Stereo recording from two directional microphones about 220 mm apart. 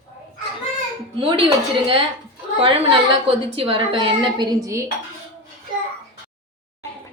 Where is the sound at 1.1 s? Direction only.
25° right (ahead or behind).